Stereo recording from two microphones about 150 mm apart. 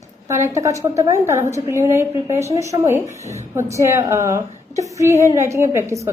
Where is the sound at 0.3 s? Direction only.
20° right (ahead or behind).